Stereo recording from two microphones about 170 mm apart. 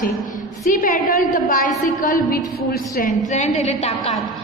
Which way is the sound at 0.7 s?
55° left (ahead or behind).